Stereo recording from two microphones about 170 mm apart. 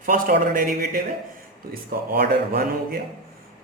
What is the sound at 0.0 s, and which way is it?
A man's voice, 55° right (ahead or behind).